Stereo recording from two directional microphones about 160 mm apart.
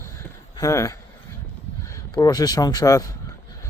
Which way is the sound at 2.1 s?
25° left (ahead or behind).